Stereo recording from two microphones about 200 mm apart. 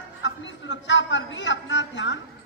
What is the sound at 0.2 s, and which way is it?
A man's voice, 65° left (ahead or behind).